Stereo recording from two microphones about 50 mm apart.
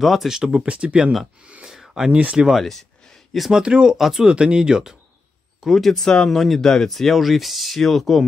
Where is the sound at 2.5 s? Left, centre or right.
Centre.